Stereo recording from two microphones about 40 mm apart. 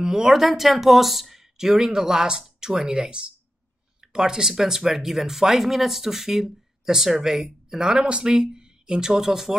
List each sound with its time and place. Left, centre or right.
0.0 s speech: centre
7.9 s speech: right